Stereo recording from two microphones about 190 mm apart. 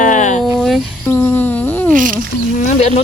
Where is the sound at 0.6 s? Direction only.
Centre (ahead or behind).